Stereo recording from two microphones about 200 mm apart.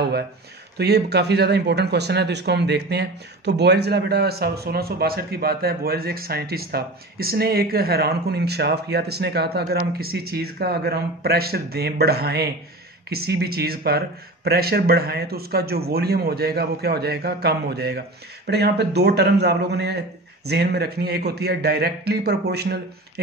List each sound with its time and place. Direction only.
0.7 s a man's voice: 55° right (ahead or behind)